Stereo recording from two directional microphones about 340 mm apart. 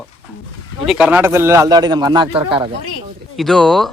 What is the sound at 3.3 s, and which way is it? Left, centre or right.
Speech, centre.